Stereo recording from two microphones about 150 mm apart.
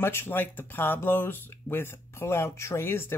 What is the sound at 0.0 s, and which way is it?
Speech, 15° left (ahead or behind).